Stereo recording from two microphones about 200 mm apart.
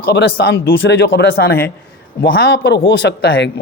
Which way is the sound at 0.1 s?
55° left (ahead or behind).